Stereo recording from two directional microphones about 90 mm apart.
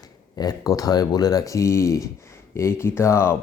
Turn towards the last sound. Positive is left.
turn(degrees=30)  # may be behind; listen again after turning